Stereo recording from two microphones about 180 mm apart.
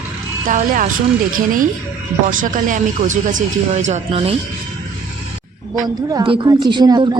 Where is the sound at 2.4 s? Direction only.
45° right (ahead or behind).